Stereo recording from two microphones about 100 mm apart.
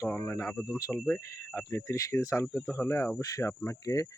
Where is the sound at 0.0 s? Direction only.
25° left (ahead or behind).